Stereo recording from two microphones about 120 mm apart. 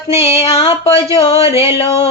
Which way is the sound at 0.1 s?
20° right (ahead or behind).